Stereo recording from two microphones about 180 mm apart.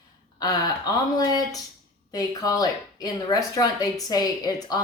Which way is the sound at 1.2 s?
20° left (ahead or behind).